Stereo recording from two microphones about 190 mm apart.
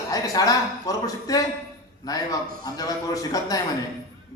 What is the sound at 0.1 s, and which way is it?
A man's voice, 20° left (ahead or behind).